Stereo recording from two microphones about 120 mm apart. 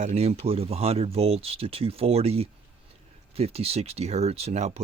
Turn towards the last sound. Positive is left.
turn(degrees=-65)  # may be behind; listen again after turning